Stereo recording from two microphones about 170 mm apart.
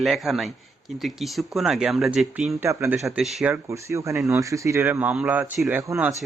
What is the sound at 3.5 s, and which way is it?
Speech, 15° right (ahead or behind).